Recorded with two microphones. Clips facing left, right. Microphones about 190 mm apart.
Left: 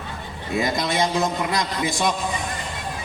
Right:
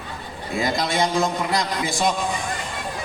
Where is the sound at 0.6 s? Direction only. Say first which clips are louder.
Even; 20° left (ahead or behind).